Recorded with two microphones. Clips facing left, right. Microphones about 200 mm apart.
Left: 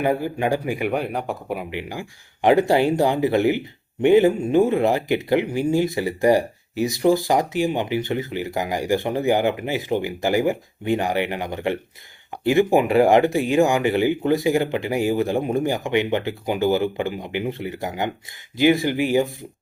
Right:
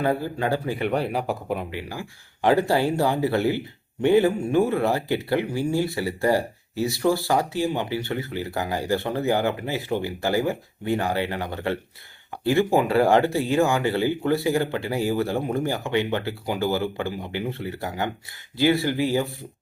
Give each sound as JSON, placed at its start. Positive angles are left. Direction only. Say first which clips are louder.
{"t": 0.0, "sound": "speech", "louder": "left 3 dB", "side_deg": 15}
{"t": 1.1, "sound": "speech", "louder": "even", "side_deg": 0}
{"t": 1.7, "sound": "speech", "louder": "left 3 dB", "side_deg": 20}